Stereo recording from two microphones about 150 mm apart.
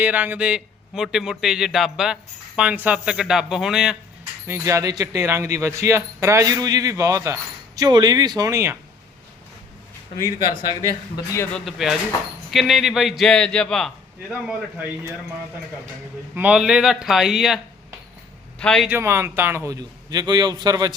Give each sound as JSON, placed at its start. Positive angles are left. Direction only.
{"t": 0.0, "sound": "a man's voice", "side_deg": -10}
{"t": 4.4, "sound": "speech", "side_deg": -20}
{"t": 10.5, "sound": "speech", "side_deg": 30}
{"t": 11.5, "sound": "a man's voice", "side_deg": 0}
{"t": 16.3, "sound": "a man's voice", "side_deg": -10}
{"t": 18.6, "sound": "a man's voice", "side_deg": 5}
{"t": 18.9, "sound": "speech", "side_deg": -15}